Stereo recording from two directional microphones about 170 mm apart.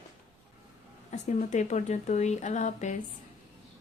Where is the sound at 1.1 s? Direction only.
45° left (ahead or behind).